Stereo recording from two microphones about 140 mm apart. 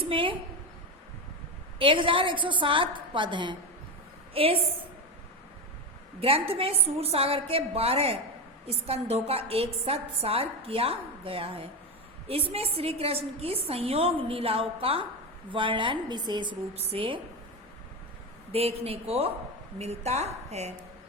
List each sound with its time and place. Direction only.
0.0 s a sound: 40° right (ahead or behind)
1.8 s a woman's voice: 40° right (ahead or behind)
6.1 s a woman's voice: 40° right (ahead or behind)
18.5 s a woman's voice: 45° right (ahead or behind)